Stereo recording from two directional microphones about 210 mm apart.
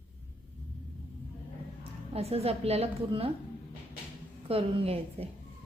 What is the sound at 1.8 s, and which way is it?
A woman's voice, 30° right (ahead or behind).